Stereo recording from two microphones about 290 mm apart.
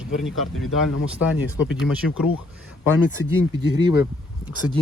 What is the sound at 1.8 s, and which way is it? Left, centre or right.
Speech, centre.